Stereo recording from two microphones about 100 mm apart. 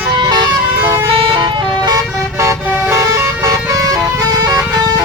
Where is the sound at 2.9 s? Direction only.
35° right (ahead or behind).